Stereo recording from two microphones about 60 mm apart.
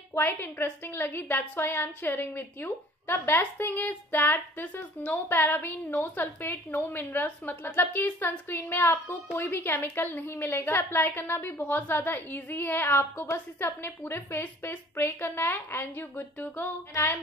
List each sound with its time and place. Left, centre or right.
0.1 s a woman's voice: left